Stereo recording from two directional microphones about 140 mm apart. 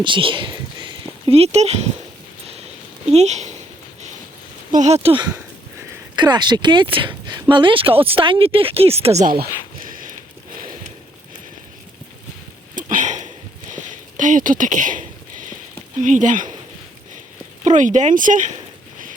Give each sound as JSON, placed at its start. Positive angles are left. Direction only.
{"t": 0.0, "sound": "speech", "side_deg": -35}
{"t": 3.1, "sound": "speech", "side_deg": -50}
{"t": 4.7, "sound": "speech", "side_deg": -55}
{"t": 5.0, "sound": "speech", "side_deg": -35}
{"t": 12.7, "sound": "a sound", "side_deg": -65}
{"t": 16.0, "sound": "speech", "side_deg": -60}
{"t": 17.7, "sound": "speech", "side_deg": -60}